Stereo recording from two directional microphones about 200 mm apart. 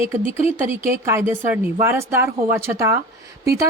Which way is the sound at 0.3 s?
30° left (ahead or behind).